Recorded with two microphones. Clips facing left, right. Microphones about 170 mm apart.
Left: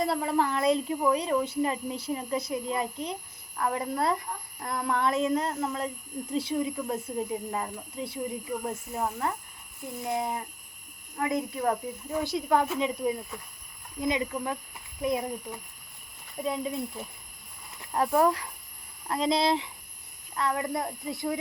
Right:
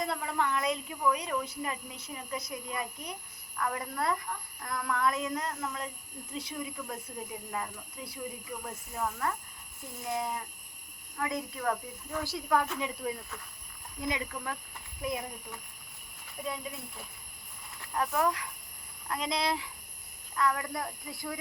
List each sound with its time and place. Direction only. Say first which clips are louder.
0.0 s a woman's voice: left 6 dB; 35° left (ahead or behind)